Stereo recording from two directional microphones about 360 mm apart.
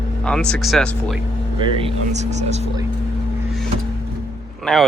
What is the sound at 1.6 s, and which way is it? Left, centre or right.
Speech, centre.